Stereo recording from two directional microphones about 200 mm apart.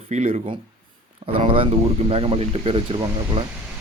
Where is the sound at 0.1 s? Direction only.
35° right (ahead or behind).